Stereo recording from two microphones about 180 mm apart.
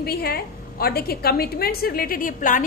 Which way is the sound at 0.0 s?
60° left (ahead or behind).